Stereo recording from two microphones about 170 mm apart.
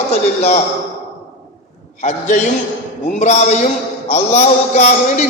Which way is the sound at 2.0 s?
45° left (ahead or behind).